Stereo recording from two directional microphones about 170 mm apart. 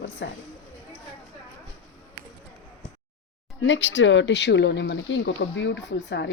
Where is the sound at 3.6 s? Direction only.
90° left.